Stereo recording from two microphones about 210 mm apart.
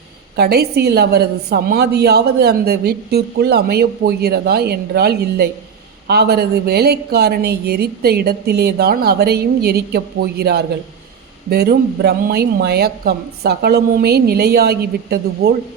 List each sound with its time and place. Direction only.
0.3 s a woman's voice: 50° right (ahead or behind)